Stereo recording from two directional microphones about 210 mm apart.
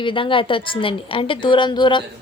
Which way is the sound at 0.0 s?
25° left (ahead or behind).